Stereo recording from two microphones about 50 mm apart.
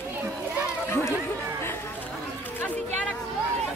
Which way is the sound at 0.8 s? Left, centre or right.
Left.